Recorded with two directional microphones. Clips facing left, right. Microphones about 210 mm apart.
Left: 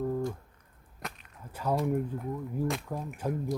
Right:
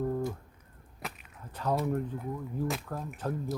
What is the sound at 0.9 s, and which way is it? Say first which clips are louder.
Whip: even; 5° right (ahead or behind).